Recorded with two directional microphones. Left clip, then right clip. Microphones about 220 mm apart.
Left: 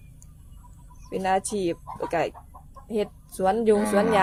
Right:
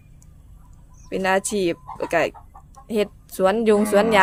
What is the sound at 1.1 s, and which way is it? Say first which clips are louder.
A woman's voice: right 4 dB; 40° right (ahead or behind).